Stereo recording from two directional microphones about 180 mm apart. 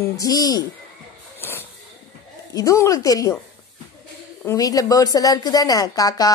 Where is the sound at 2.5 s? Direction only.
15° left (ahead or behind).